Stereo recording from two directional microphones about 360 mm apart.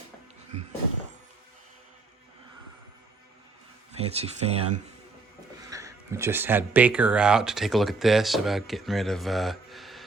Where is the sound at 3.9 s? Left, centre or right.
Centre.